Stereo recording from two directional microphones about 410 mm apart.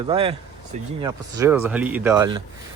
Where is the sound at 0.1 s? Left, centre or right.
Centre.